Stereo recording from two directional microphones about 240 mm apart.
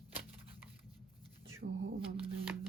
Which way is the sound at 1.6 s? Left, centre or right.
Right.